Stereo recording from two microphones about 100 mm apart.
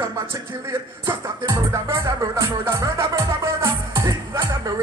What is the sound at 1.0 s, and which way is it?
Music, 30° right (ahead or behind).